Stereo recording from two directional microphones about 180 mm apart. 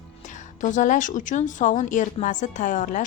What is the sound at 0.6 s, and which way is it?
A woman's voice, 45° left (ahead or behind).